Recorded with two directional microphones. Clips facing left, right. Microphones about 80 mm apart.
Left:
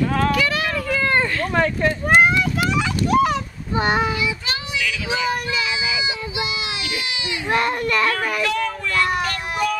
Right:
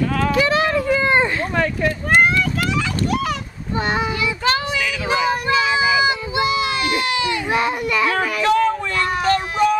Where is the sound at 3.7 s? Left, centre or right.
Centre.